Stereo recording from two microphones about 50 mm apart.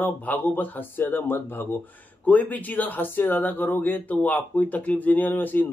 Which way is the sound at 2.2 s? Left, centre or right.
Left.